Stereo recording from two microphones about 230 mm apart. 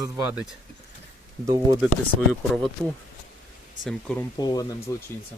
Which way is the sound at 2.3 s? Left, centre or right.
Centre.